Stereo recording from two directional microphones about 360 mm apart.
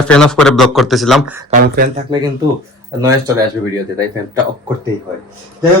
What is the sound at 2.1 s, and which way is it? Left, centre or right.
Speech, centre.